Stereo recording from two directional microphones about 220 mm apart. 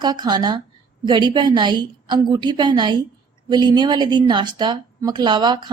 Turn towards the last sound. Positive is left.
turn(degrees=-20)  # may be behind; listen again after turning